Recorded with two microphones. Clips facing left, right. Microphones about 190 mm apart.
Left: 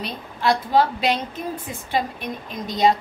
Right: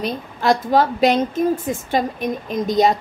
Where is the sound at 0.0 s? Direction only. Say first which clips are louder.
Right 3 dB; 45° right (ahead or behind).